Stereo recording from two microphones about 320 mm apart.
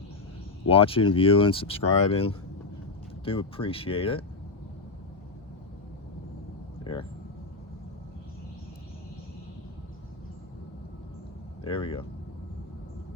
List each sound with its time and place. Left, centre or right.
0.7 s speech: centre
11.6 s speech: centre